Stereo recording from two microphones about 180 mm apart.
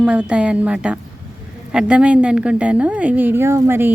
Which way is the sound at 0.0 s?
5° right (ahead or behind).